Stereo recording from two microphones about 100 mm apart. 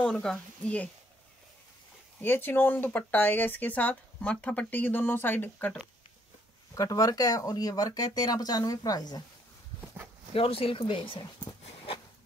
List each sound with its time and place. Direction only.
0.0 s speech: 10° left (ahead or behind)
2.2 s speech: 20° left (ahead or behind)
6.7 s speech: 35° left (ahead or behind)
10.3 s speech: 70° left (ahead or behind); by 11.5 s 50° left (ahead or behind)
11.6 s a sound: 65° left (ahead or behind)